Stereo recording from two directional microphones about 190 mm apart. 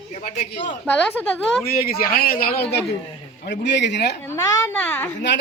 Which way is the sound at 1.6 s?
50° left (ahead or behind).